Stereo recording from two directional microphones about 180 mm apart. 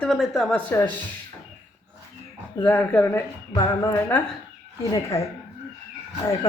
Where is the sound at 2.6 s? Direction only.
10° left (ahead or behind).